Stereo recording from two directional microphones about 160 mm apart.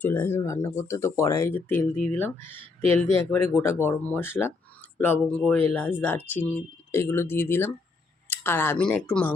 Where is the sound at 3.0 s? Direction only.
15° left (ahead or behind).